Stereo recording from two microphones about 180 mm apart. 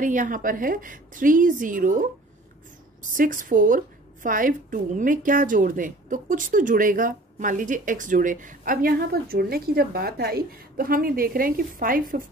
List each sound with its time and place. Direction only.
0.0 s a woman's voice: 45° right (ahead or behind)